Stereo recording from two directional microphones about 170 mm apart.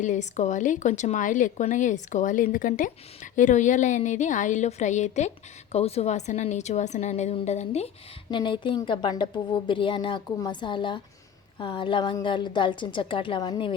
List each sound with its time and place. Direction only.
0.0 s a woman's voice: 45° left (ahead or behind)
8.3 s a woman's voice: 30° left (ahead or behind)